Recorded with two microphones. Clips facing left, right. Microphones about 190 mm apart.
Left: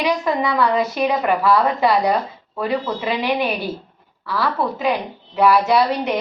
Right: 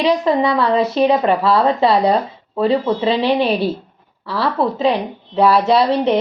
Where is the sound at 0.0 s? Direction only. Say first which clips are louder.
Right 5 dB; 25° right (ahead or behind).